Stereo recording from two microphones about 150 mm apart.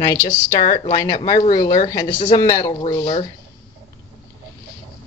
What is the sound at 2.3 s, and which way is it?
Speech, 25° left (ahead or behind).